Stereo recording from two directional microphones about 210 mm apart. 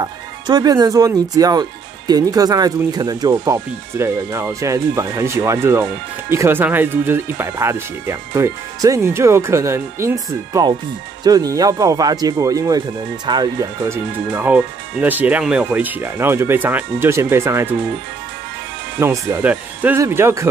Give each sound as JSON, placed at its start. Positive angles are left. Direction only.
{"t": 0.0, "sound": "speech", "side_deg": -20}
{"t": 18.9, "sound": "speech", "side_deg": -15}